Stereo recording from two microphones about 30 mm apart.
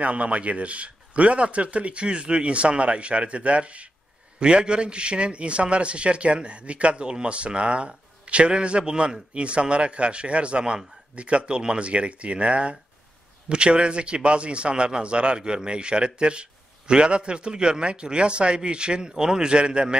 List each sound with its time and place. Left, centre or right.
0.0 s a man's voice: right
4.4 s a man's voice: right